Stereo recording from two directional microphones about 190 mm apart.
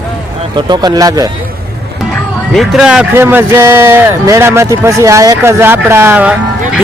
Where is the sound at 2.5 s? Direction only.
Centre (ahead or behind).